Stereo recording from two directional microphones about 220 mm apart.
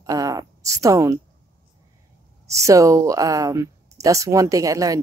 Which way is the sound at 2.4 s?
15° right (ahead or behind).